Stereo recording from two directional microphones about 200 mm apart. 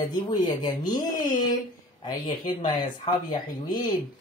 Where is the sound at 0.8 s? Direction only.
40° left (ahead or behind).